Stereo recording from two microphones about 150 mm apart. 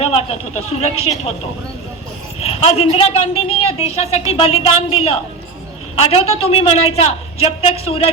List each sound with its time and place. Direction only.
0.0 s a woman's voice: 40° left (ahead or behind)
2.4 s a woman's voice: 45° left (ahead or behind)